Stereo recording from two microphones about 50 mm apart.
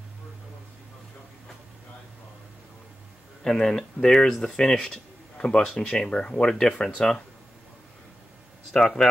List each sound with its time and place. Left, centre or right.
3.4 s speech: centre
8.7 s speech: centre